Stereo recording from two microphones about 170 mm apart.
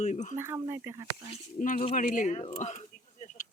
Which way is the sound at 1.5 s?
50° left (ahead or behind).